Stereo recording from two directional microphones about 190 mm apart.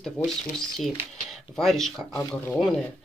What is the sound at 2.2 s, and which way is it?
Speech, 15° left (ahead or behind).